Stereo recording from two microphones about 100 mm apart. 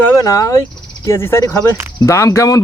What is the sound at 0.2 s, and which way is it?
Speech, 35° left (ahead or behind).